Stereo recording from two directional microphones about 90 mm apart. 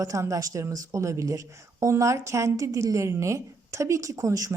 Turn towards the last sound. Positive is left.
turn(degrees=-40)  # may be behind; listen again after turning